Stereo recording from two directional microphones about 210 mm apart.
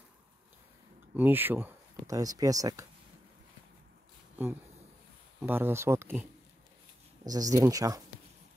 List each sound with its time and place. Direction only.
1.1 s speech: 10° right (ahead or behind)
5.4 s speech: 10° right (ahead or behind)
7.2 s speech: 15° right (ahead or behind)